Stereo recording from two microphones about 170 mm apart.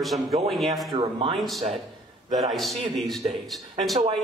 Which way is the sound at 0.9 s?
30° right (ahead or behind).